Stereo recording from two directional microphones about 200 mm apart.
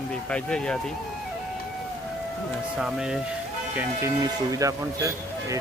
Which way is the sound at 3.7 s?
15° right (ahead or behind).